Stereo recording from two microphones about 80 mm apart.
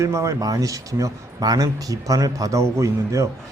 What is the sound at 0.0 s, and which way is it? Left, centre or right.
A man's voice, right.